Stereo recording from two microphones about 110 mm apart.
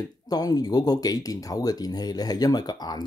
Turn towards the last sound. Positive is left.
turn(degrees=40)  # may be behind; listen again after turning